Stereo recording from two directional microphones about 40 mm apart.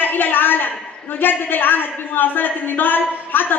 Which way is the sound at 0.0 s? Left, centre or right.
Left.